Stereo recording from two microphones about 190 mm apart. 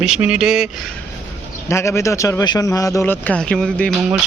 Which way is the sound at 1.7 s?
15° left (ahead or behind).